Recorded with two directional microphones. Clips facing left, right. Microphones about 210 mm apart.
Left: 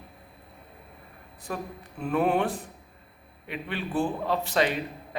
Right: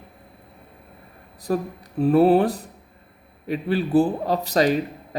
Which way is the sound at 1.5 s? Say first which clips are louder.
Right 10 dB; 40° right (ahead or behind).